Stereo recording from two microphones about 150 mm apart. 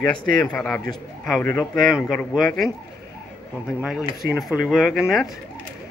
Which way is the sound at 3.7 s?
5° right (ahead or behind).